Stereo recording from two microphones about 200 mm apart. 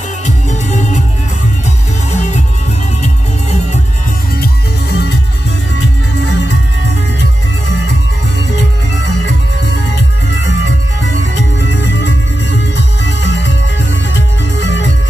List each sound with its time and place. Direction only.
0.2 s music: 35° left (ahead or behind)
4.4 s music: 55° left (ahead or behind)
8.5 s music: 60° left (ahead or behind)